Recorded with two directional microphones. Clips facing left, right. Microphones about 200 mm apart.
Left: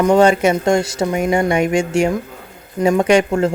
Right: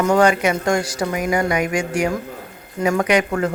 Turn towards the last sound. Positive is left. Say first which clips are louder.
# left 4 dB
turn(degrees=25)  # may be behind; listen again after turning